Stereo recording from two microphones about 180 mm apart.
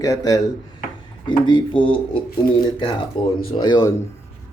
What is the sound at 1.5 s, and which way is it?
Speech, 25° left (ahead or behind).